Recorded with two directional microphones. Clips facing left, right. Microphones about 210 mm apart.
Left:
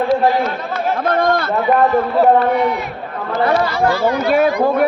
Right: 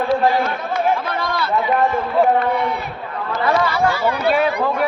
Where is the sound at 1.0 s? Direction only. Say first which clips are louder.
Left 7 dB; 50° left (ahead or behind).